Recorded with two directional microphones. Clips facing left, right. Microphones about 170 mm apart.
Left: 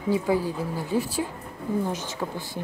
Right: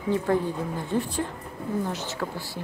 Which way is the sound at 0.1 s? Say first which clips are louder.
Even; 10° left (ahead or behind).